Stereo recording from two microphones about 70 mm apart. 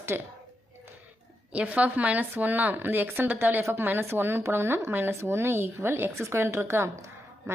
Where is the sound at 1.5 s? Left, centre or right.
Centre.